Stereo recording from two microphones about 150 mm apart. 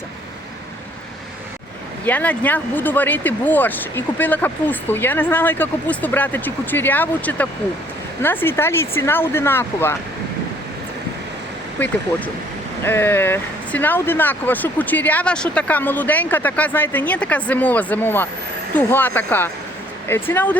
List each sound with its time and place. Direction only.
2.0 s speech: 10° left (ahead or behind)
11.8 s speech: 10° left (ahead or behind)